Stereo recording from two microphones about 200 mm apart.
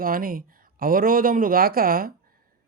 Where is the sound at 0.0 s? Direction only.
45° right (ahead or behind).